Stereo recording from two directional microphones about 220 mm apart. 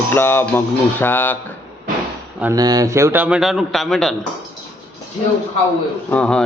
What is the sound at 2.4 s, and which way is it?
A man's voice, 15° right (ahead or behind).